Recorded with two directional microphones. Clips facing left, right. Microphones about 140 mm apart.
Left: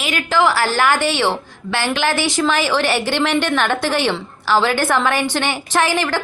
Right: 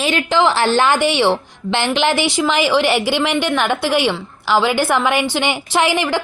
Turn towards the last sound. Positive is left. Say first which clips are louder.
# right 1 dB
turn(degrees=-15)  # may be behind; listen again after turning